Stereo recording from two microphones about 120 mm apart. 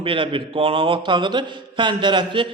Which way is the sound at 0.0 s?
45° right (ahead or behind).